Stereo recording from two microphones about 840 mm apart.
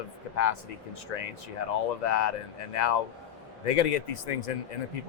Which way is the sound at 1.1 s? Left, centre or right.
Left.